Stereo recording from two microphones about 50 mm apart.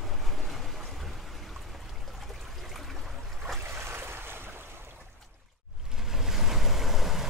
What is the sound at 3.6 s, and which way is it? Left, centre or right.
Boat, right.